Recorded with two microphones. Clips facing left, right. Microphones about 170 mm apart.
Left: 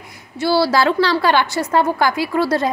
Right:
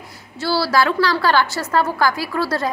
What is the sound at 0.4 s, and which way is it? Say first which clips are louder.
A woman's voice: left 3 dB; 20° left (ahead or behind).